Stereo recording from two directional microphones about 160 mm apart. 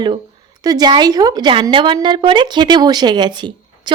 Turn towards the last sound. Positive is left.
turn(degrees=-30)  # may be behind; listen again after turning